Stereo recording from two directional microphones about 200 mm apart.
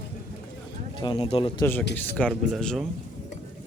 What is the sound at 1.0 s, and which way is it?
Speech, 25° left (ahead or behind).